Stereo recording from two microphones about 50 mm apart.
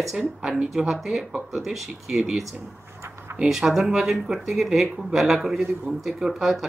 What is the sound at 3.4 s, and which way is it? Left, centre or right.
Speech, centre.